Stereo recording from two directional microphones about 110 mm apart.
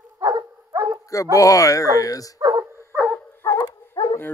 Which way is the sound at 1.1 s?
30° left (ahead or behind).